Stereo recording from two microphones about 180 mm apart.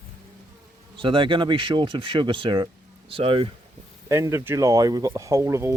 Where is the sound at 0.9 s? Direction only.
30° right (ahead or behind).